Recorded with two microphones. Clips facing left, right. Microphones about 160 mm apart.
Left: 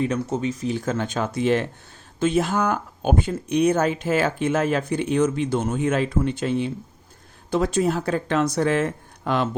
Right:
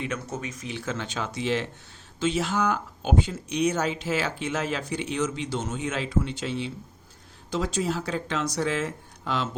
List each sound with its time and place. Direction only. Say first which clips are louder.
0.0 s speech: left 9 dB; 35° left (ahead or behind); by 9.5 s 55° left (ahead or behind)